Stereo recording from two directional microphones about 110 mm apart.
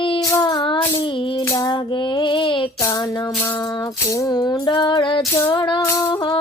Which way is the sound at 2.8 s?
30° left (ahead or behind).